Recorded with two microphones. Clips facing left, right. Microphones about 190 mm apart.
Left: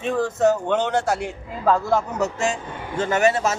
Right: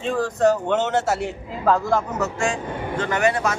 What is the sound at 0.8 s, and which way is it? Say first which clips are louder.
Speech: even; 5° right (ahead or behind).